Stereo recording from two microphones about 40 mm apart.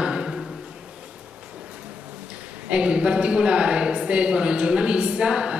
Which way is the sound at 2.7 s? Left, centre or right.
Right.